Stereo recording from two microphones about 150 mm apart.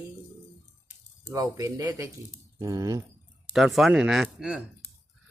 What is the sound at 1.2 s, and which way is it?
Speech, 20° right (ahead or behind).